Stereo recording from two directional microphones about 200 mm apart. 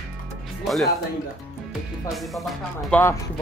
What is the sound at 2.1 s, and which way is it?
Speech, centre (ahead or behind).